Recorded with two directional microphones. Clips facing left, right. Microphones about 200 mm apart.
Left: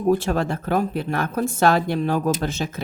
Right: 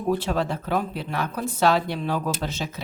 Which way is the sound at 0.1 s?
50° left (ahead or behind).